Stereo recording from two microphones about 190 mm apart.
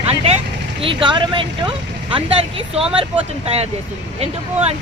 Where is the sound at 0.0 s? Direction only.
30° right (ahead or behind).